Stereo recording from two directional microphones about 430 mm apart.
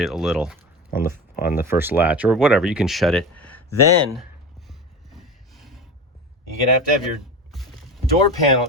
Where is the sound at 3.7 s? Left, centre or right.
Left.